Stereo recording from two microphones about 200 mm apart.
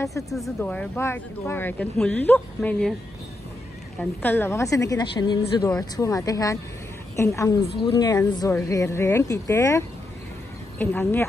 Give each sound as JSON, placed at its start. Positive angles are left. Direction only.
{"t": 0.3, "sound": "speech", "side_deg": 0}
{"t": 4.0, "sound": "speech", "side_deg": 10}